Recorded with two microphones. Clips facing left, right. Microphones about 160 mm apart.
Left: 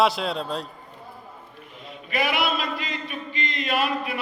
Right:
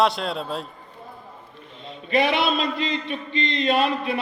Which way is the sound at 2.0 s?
25° right (ahead or behind).